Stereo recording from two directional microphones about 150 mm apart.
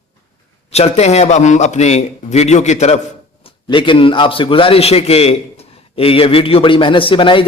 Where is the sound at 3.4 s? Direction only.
35° left (ahead or behind).